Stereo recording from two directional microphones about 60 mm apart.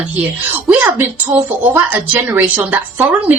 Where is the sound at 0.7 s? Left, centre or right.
Right.